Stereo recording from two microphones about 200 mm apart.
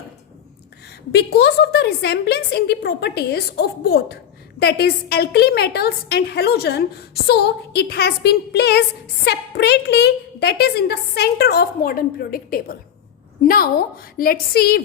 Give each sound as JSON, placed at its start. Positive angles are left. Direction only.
{"t": 1.1, "sound": "a woman's voice", "side_deg": 55}